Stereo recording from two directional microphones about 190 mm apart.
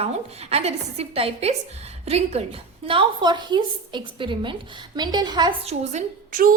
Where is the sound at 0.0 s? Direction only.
35° right (ahead or behind).